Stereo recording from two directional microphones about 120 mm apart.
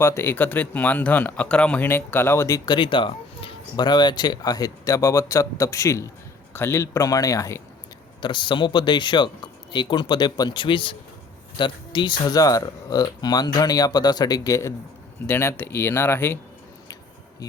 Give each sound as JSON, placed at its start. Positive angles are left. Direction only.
{"t": 0.0, "sound": "speech", "side_deg": 20}
{"t": 2.6, "sound": "speech", "side_deg": 40}
{"t": 8.2, "sound": "speech", "side_deg": 40}